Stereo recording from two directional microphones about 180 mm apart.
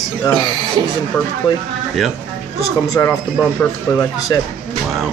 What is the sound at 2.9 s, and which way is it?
A man's voice, 15° left (ahead or behind).